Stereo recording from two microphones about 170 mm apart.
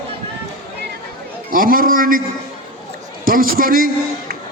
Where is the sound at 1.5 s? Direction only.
55° right (ahead or behind).